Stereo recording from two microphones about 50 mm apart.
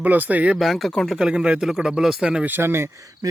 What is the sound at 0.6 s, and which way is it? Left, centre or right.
Speech, centre.